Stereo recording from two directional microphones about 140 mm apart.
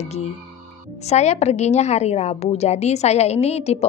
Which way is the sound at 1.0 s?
55° left (ahead or behind).